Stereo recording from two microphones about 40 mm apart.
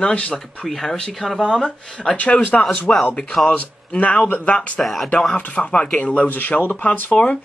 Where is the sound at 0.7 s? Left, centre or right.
Centre.